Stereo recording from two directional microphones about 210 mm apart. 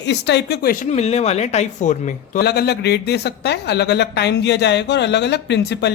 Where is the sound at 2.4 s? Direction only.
50° left (ahead or behind).